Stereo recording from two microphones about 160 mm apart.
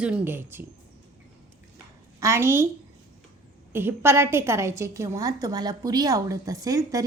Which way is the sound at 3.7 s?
15° right (ahead or behind).